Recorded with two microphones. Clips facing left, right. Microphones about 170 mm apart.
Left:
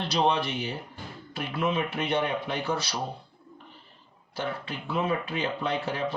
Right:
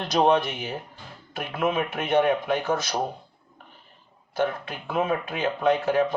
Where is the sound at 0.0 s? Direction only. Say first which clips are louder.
Right 5 dB; 50° right (ahead or behind).